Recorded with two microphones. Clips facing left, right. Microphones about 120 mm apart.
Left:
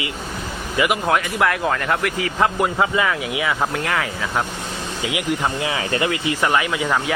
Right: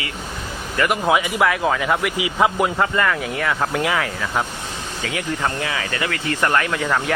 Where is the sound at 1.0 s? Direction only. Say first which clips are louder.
Right 1 dB; 5° right (ahead or behind).